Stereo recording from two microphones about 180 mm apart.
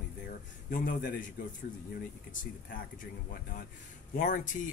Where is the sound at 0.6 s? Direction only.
50° left (ahead or behind).